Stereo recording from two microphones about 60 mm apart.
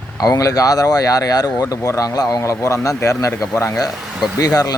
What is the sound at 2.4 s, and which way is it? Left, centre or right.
Speech, left.